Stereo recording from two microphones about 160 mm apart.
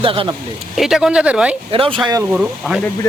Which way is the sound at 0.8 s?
Centre (ahead or behind).